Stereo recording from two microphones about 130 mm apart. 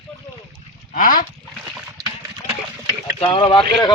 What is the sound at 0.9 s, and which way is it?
Speech, 90° left.